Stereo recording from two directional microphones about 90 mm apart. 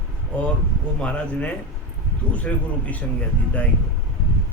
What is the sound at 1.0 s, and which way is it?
Speech, 15° left (ahead or behind).